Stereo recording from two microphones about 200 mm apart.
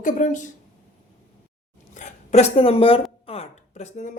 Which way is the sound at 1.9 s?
35° left (ahead or behind).